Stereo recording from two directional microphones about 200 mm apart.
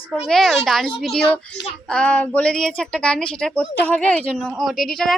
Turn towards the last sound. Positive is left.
turn(degrees=0)  # may be behind; listen again after turning